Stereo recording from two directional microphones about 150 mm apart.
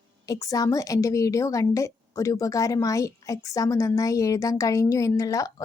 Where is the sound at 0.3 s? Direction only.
25° left (ahead or behind).